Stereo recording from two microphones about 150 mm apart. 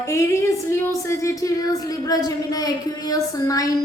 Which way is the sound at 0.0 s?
20° left (ahead or behind).